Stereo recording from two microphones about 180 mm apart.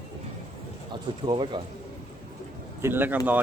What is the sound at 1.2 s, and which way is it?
Speech, 25° right (ahead or behind).